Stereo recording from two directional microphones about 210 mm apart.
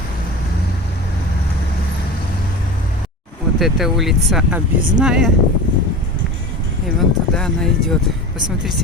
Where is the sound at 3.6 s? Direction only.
Centre (ahead or behind).